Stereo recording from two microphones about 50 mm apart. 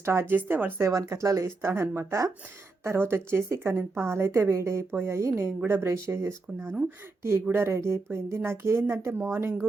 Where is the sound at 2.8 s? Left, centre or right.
Right.